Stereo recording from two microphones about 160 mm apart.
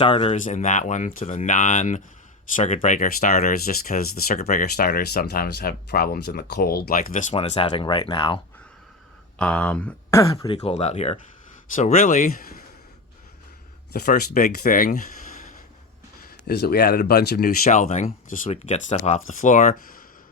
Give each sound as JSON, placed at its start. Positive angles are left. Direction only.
{"t": 0.0, "sound": "speech", "side_deg": 35}
{"t": 0.3, "sound": "speech", "side_deg": 50}
{"t": 7.3, "sound": "speech", "side_deg": 40}
{"t": 9.4, "sound": "speech", "side_deg": 5}
{"t": 10.4, "sound": "speech", "side_deg": 35}
{"t": 13.9, "sound": "speech", "side_deg": 70}
{"t": 16.2, "sound": "speech", "side_deg": 85}